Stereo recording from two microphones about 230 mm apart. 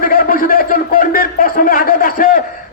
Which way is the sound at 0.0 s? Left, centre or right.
Left.